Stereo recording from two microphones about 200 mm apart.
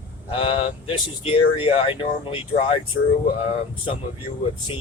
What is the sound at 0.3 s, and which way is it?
Speech, 25° left (ahead or behind).